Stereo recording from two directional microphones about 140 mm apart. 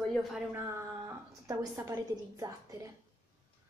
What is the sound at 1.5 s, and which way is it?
A woman's voice, 25° right (ahead or behind).